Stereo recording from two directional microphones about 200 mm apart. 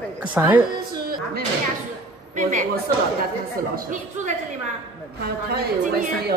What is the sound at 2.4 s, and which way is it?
Speech, 40° right (ahead or behind).